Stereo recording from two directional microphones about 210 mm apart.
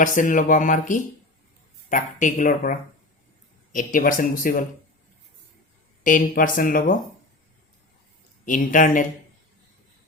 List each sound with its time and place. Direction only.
0.0 s speech: 40° left (ahead or behind)
6.0 s speech: 40° left (ahead or behind)
8.4 s speech: 40° left (ahead or behind)